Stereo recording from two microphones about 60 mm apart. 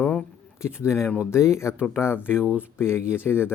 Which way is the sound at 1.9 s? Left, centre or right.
Left.